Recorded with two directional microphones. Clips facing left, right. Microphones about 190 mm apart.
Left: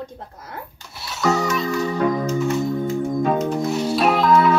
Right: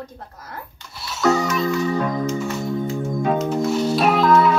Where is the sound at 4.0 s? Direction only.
Centre (ahead or behind).